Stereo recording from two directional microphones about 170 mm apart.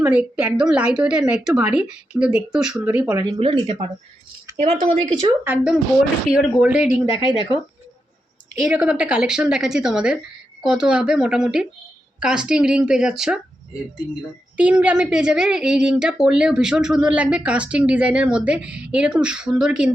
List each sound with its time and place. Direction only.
0.0 s a woman's voice: 10° right (ahead or behind)
3.3 s speech: 30° right (ahead or behind)
5.5 s a woman's voice: 5° right (ahead or behind)
8.6 s a woman's voice: 5° right (ahead or behind)
14.5 s a woman's voice: 5° right (ahead or behind)